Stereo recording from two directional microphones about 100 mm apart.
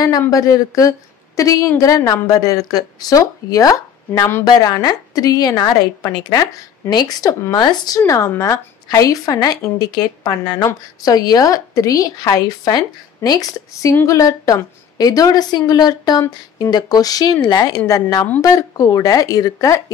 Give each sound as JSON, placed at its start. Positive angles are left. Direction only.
{"t": 0.3, "sound": "a woman's voice", "side_deg": 35}
{"t": 4.5, "sound": "a woman's voice", "side_deg": 45}
{"t": 8.3, "sound": "a woman's voice", "side_deg": 30}